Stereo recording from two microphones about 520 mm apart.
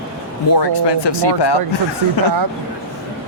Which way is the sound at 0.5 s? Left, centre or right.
Left.